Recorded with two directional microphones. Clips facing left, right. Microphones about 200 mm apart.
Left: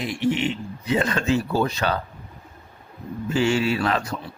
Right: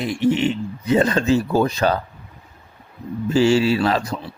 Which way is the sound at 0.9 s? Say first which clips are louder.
Right 5 dB; 35° right (ahead or behind).